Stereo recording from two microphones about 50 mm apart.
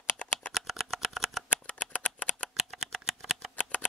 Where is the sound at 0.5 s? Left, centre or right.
Centre.